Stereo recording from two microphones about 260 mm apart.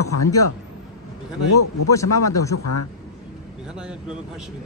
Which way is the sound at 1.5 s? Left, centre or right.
Left.